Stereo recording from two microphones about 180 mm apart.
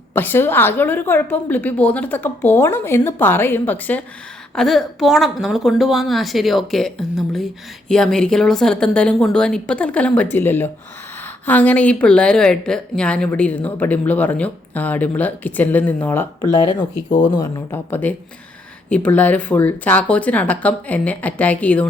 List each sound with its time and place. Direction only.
0.1 s a woman's voice: 10° left (ahead or behind)
17.1 s speech: 25° left (ahead or behind)
17.7 s a woman's voice: 10° left (ahead or behind)